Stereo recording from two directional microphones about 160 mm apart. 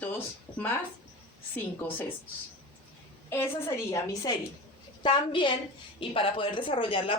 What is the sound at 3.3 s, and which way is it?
A woman's voice, 15° left (ahead or behind).